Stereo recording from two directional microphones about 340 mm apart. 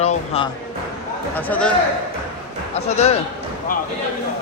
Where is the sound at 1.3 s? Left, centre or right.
Centre.